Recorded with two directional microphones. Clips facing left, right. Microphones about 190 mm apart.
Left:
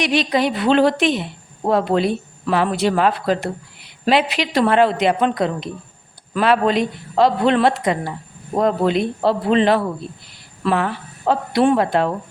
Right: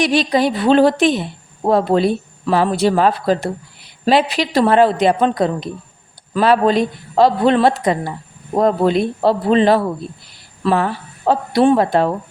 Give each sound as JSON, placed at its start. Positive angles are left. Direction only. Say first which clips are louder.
{"t": 0.0, "sound": "speech", "louder": "right 3 dB", "side_deg": -40}